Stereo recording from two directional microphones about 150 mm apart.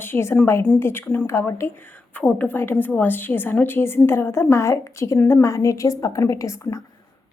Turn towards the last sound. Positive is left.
turn(degrees=20)  # may be behind; listen again after turning